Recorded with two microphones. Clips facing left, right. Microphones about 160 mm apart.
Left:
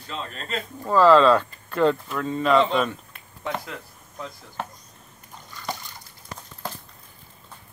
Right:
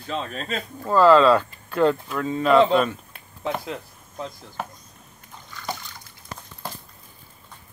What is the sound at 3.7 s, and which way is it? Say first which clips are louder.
Speech: right 5 dB; 30° right (ahead or behind).